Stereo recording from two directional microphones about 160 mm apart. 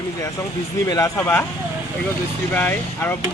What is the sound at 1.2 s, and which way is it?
Speech, 15° left (ahead or behind).